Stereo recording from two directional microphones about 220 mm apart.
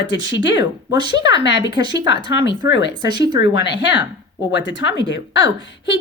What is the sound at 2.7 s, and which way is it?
Speech, 55° left (ahead or behind).